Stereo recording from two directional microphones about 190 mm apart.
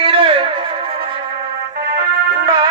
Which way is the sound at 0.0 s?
30° right (ahead or behind).